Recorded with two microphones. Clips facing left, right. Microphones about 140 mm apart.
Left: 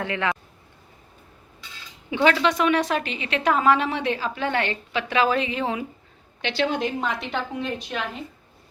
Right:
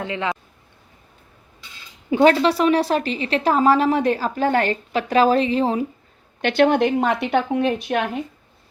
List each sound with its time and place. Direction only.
0.0 s speech: 20° right (ahead or behind)
2.0 s a woman's voice: 40° right (ahead or behind)
6.4 s a woman's voice: 50° right (ahead or behind)